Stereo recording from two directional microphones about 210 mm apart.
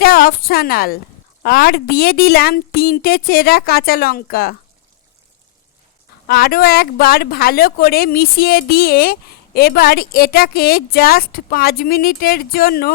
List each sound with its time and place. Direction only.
0.0 s a woman's voice: 45° left (ahead or behind)
6.2 s speech: 45° left (ahead or behind)